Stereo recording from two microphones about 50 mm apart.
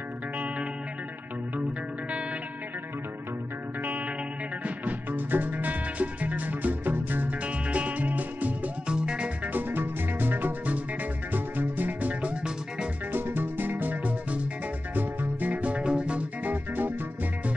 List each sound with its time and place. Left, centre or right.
4.6 s music: right
7.4 s music: right
8.8 s music: centre
9.5 s music: right
13.1 s music: right